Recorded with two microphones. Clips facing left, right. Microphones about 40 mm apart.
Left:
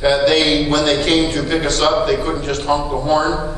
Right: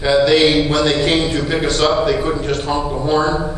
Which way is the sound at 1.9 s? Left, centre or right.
Centre.